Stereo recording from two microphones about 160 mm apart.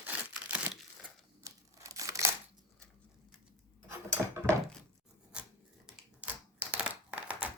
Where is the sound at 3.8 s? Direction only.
15° right (ahead or behind).